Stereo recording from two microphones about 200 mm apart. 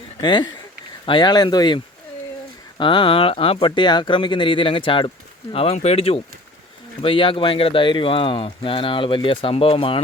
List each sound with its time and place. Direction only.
0.2 s speech: 20° left (ahead or behind)